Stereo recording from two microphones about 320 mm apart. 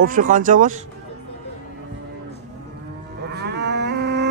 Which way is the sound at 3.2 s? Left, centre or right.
Right.